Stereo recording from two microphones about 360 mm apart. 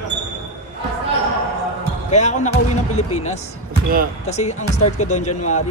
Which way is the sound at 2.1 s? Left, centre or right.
Centre.